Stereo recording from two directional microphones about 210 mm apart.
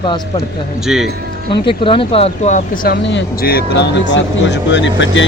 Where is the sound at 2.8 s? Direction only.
55° left (ahead or behind).